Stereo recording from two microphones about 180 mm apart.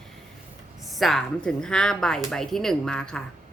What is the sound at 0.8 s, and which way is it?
A woman's voice, centre (ahead or behind).